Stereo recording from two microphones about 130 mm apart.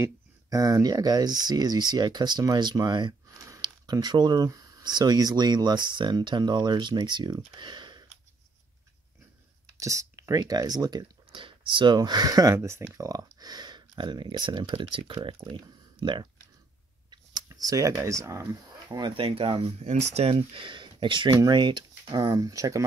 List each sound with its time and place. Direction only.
0.0 s speech: 30° right (ahead or behind)
9.8 s speech: 25° right (ahead or behind); by 19.9 s 45° right (ahead or behind)
19.9 s speech: 55° right (ahead or behind); by 22.8 s 25° right (ahead or behind)